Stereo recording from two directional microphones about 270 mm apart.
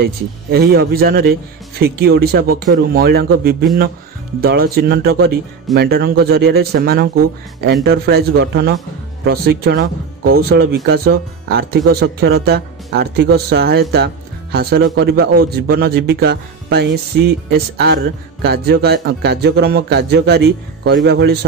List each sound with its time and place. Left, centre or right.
0.0 s speech: right